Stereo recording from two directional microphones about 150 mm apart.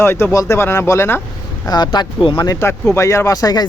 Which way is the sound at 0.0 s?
15° left (ahead or behind).